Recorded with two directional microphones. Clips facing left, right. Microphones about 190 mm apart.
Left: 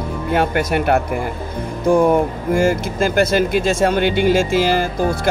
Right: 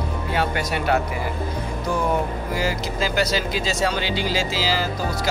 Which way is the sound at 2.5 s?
50° left (ahead or behind).